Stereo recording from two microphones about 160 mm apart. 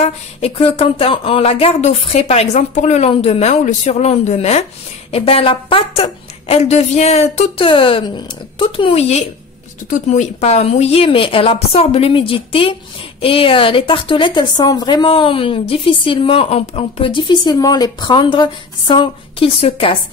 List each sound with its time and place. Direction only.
0.0 s a woman's voice: 40° left (ahead or behind)